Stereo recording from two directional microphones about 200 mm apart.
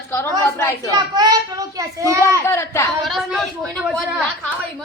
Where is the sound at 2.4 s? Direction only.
15° left (ahead or behind).